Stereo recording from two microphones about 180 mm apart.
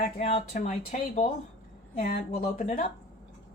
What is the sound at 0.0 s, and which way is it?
Speech, 35° left (ahead or behind).